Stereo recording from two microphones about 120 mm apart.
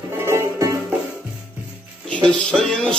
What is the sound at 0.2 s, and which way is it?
Music, 20° right (ahead or behind).